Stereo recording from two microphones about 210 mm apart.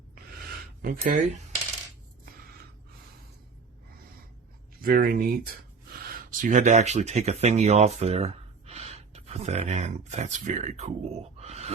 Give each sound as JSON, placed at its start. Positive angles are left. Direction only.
{"t": 0.8, "sound": "speech", "side_deg": -40}
{"t": 4.8, "sound": "speech", "side_deg": -45}